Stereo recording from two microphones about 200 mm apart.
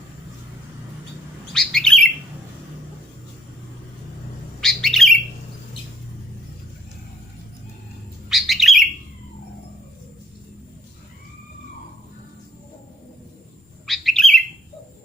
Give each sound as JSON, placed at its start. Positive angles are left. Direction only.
{"t": 1.5, "sound": "bird", "side_deg": 0}
{"t": 4.6, "sound": "bird", "side_deg": 0}
{"t": 8.3, "sound": "bird", "side_deg": 0}
{"t": 13.8, "sound": "bird", "side_deg": 0}